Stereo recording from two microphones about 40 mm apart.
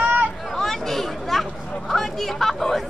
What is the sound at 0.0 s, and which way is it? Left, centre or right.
Hubbub, right.